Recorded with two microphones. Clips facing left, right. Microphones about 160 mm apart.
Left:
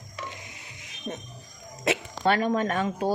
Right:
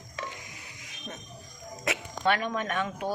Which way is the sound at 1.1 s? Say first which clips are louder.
Left 7 dB; 25° left (ahead or behind).